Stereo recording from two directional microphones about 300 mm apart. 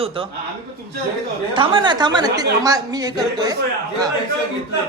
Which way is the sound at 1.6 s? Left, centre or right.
Centre.